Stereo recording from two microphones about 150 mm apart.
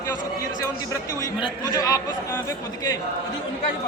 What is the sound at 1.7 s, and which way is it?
Speech, 25° left (ahead or behind).